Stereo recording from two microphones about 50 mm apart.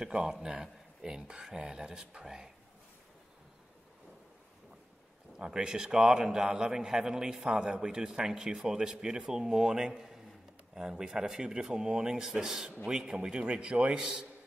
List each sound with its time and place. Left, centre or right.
0.0 s a man's voice: centre
5.4 s a man's voice: centre